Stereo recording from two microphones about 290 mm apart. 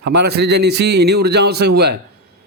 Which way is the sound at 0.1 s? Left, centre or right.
Right.